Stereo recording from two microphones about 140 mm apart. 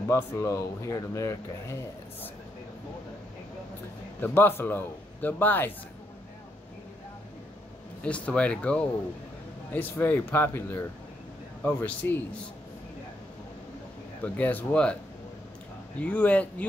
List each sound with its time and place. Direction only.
0.1 s speech: 20° left (ahead or behind)
4.2 s a man's voice: 15° left (ahead or behind)
8.0 s a man's voice: 10° left (ahead or behind)
14.2 s a man's voice: 10° left (ahead or behind)
16.0 s a man's voice: 10° left (ahead or behind)